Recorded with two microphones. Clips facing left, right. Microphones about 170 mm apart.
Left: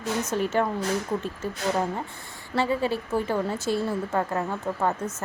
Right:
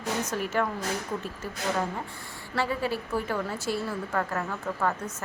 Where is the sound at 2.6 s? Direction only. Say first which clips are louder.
Left 4 dB; 25° left (ahead or behind).